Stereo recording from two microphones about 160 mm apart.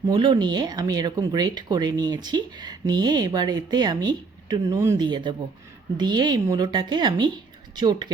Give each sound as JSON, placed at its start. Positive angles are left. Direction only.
{"t": 0.1, "sound": "speech", "side_deg": -30}